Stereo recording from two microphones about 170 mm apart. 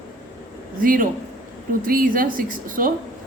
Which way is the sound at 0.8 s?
55° right (ahead or behind).